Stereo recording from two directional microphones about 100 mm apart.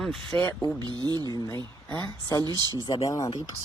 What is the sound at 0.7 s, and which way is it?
Speech, 45° right (ahead or behind).